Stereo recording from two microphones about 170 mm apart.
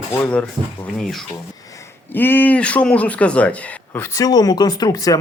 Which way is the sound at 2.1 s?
10° left (ahead or behind).